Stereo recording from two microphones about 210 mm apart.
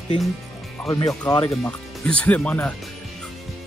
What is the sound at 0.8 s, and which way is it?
Speech, 20° left (ahead or behind).